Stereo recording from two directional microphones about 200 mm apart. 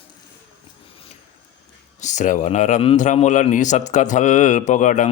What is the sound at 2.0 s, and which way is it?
Speech, 35° left (ahead or behind).